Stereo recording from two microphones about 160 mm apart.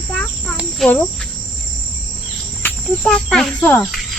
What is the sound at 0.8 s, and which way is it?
Speech, centre (ahead or behind).